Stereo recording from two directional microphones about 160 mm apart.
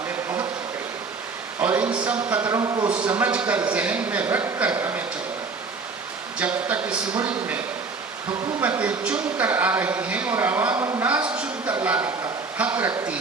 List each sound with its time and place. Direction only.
1.6 s a sound: 10° right (ahead or behind)
2.3 s speech: 10° right (ahead or behind)
2.6 s a man's voice: 25° right (ahead or behind)
2.9 s a man's voice: 10° right (ahead or behind)
6.4 s speech: 10° right (ahead or behind)
8.6 s speech: 10° right (ahead or behind)
12.5 s a sound: 10° right (ahead or behind)